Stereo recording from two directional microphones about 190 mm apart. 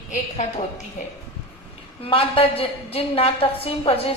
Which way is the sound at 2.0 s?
30° left (ahead or behind).